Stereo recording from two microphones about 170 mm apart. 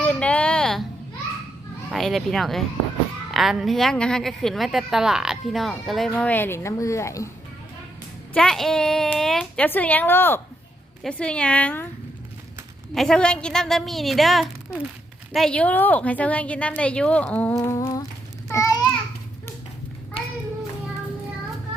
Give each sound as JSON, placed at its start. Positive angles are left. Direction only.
{"t": 0.0, "sound": "a sound", "side_deg": 5}
{"t": 1.9, "sound": "a woman's voice", "side_deg": 0}
{"t": 8.3, "sound": "a woman's voice", "side_deg": 5}
{"t": 12.9, "sound": "a woman's voice", "side_deg": 5}
{"t": 17.6, "sound": "humming", "side_deg": 20}
{"t": 18.4, "sound": "a sound", "side_deg": 15}